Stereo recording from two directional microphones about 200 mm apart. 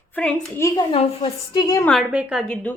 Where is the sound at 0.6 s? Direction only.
20° left (ahead or behind).